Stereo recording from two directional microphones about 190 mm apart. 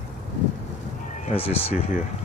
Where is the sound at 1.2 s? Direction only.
30° left (ahead or behind).